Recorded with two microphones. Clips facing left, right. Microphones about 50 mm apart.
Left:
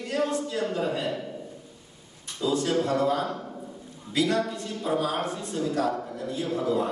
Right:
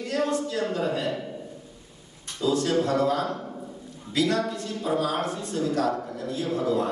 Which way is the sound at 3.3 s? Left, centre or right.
Centre.